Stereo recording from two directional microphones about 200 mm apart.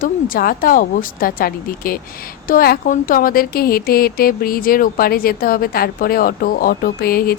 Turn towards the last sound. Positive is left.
turn(degrees=50)  # may be behind; listen again after turning